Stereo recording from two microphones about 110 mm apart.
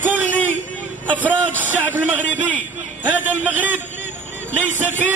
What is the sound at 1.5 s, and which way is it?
Speech, 15° right (ahead or behind).